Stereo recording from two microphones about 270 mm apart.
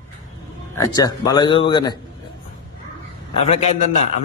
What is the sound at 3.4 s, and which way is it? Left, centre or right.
Speech, left.